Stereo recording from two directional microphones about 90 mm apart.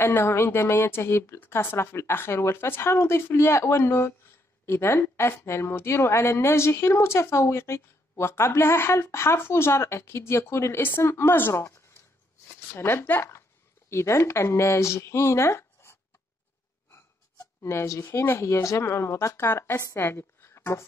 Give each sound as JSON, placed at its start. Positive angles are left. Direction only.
{"t": 0.0, "sound": "a woman's voice", "side_deg": 30}
{"t": 17.6, "sound": "speech", "side_deg": 35}